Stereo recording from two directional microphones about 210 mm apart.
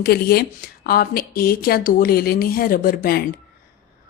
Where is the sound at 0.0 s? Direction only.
50° left (ahead or behind).